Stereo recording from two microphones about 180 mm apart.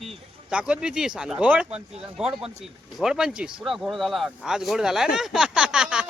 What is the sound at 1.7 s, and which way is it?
Speech, 35° right (ahead or behind).